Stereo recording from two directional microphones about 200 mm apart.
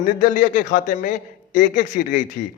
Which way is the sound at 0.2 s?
40° left (ahead or behind).